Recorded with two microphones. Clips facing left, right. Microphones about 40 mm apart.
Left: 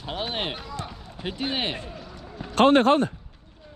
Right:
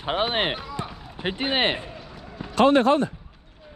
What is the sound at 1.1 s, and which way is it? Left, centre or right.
Speech, right.